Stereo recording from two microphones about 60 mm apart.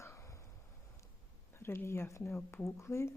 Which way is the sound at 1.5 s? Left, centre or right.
Left.